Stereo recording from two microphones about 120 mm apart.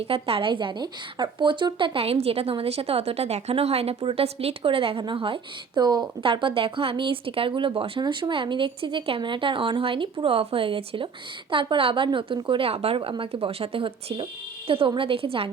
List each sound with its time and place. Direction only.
0.0 s a woman's voice: 55° right (ahead or behind)